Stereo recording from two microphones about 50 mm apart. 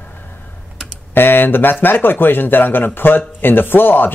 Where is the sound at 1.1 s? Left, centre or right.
Left.